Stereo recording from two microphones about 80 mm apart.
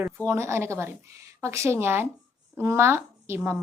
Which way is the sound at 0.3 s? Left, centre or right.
Right.